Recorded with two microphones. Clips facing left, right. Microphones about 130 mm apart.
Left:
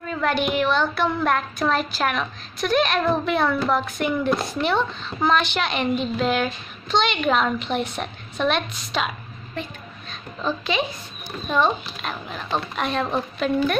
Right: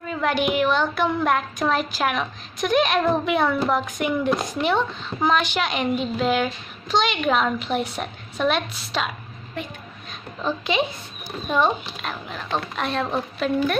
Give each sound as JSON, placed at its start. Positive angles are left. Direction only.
{"t": 0.0, "sound": "a child's voice", "side_deg": -10}
{"t": 10.4, "sound": "a woman's voice", "side_deg": -20}
{"t": 12.0, "sound": "a woman's voice", "side_deg": 0}